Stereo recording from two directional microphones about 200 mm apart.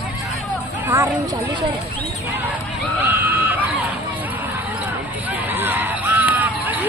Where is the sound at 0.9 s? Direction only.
15° right (ahead or behind).